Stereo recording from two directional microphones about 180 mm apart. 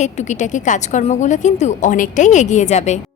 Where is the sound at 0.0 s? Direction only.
40° left (ahead or behind).